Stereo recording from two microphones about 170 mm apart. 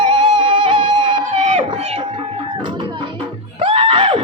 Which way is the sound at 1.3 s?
45° right (ahead or behind).